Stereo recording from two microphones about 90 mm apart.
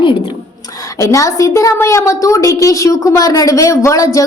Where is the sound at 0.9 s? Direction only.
35° left (ahead or behind).